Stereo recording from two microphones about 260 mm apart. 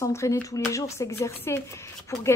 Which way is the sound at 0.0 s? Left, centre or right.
Centre.